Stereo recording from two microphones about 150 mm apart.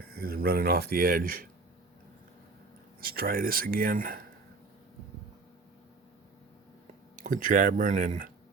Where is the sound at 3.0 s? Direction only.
75° right (ahead or behind).